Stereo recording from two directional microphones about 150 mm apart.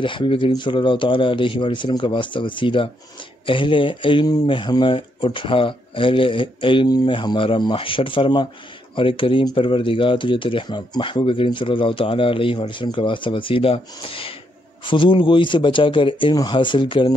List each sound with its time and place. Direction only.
0.0 s speech: 35° left (ahead or behind)